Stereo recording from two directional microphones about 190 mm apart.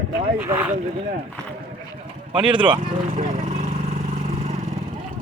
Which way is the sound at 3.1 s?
40° right (ahead or behind).